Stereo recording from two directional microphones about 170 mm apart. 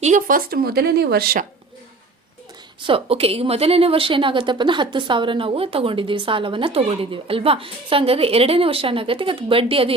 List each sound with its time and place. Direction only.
0.0 s a woman's voice: 50° right (ahead or behind)
2.8 s a woman's voice: 35° right (ahead or behind)